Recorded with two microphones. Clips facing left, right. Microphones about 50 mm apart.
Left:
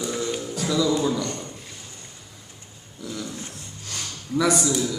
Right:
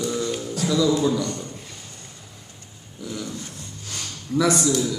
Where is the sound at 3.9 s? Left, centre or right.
Centre.